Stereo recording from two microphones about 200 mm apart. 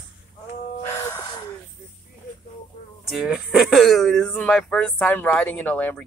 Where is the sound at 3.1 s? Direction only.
5° right (ahead or behind).